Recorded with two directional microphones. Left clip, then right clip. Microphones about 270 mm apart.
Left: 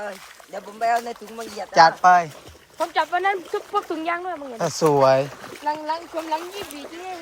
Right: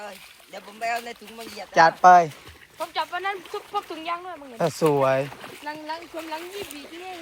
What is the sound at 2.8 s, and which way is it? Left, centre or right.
Speech, left.